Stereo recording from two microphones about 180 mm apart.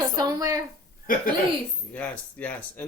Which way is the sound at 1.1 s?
50° left (ahead or behind).